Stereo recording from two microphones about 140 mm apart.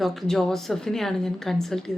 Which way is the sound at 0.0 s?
Centre (ahead or behind).